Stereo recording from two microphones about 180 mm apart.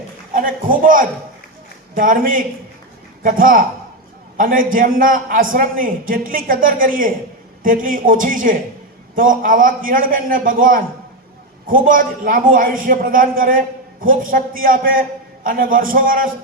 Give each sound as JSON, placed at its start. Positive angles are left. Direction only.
{"t": 0.3, "sound": "a man's voice", "side_deg": -50}